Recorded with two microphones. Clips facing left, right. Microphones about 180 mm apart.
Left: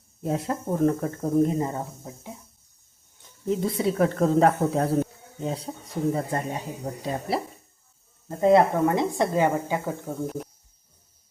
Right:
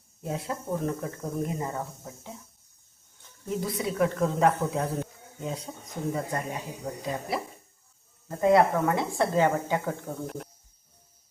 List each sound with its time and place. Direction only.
0.2 s speech: 45° left (ahead or behind)
1.2 s speech: 30° left (ahead or behind)
3.2 s speech: 25° left (ahead or behind)